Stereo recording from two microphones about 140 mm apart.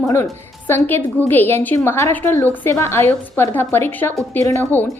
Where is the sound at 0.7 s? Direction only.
15° left (ahead or behind).